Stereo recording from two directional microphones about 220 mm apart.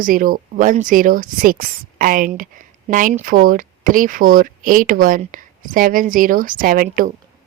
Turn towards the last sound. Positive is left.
turn(degrees=-40)  # may be behind; listen again after turning